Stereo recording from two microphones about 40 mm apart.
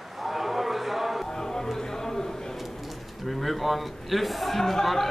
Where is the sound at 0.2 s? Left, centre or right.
Centre.